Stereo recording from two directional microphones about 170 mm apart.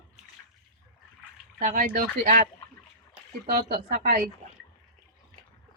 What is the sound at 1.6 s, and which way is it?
Speech, 50° right (ahead or behind).